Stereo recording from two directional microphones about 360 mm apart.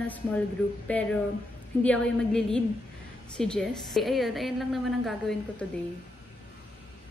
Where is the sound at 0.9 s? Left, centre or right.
Centre.